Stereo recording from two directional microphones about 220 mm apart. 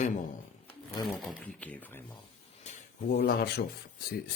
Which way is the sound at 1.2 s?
5° left (ahead or behind).